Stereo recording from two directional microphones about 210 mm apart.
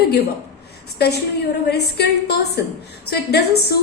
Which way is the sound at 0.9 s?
50° left (ahead or behind).